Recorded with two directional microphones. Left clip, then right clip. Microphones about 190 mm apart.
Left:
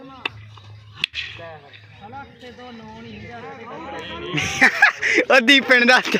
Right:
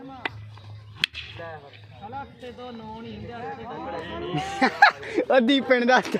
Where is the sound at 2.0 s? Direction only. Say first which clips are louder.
Right 1 dB; 20° left (ahead or behind).